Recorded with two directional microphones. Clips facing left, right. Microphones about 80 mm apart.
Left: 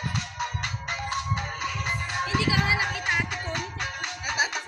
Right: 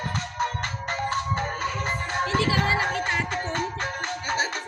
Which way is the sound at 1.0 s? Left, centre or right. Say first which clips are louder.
Right 5 dB; right.